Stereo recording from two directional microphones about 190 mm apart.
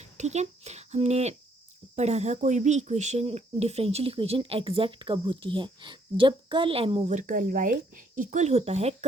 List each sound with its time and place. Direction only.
0.0 s speech: 35° right (ahead or behind)